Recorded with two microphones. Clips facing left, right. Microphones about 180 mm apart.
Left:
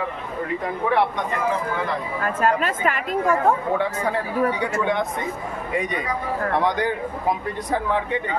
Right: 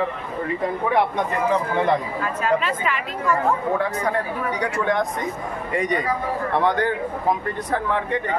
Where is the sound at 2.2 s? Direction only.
50° left (ahead or behind).